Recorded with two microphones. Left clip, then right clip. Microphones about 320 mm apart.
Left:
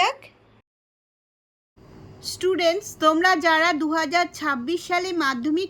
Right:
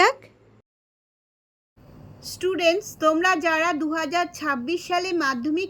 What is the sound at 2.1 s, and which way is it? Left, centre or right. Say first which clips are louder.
A woman's voice: left 2 dB; centre.